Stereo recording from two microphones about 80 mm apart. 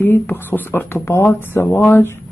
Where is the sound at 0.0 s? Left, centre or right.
Left.